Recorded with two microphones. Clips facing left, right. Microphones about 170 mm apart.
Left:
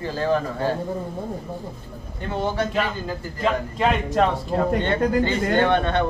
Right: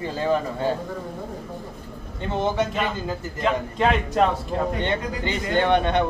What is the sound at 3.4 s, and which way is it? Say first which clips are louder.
A man's voice: even; centre (ahead or behind).